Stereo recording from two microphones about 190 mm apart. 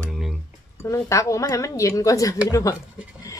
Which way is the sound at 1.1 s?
15° left (ahead or behind).